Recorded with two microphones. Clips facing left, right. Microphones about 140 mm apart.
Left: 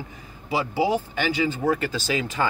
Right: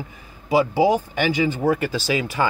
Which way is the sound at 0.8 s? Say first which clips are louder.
Right 5 dB; 15° right (ahead or behind).